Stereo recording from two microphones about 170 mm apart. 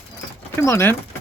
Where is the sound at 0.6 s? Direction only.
15° left (ahead or behind).